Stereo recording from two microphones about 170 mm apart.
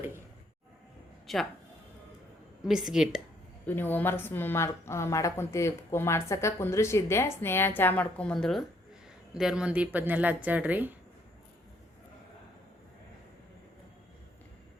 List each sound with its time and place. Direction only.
1.3 s a man's voice: centre (ahead or behind)
2.6 s a woman's voice: 5° right (ahead or behind)
3.7 s a woman's voice: 10° left (ahead or behind); by 10.9 s 10° right (ahead or behind)